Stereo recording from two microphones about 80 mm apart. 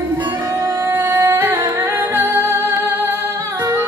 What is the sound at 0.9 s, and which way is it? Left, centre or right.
Music, right.